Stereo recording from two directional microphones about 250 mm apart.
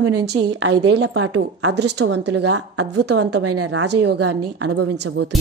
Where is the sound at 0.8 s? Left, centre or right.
Right.